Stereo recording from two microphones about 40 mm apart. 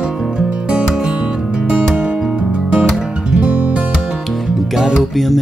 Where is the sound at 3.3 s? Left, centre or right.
Right.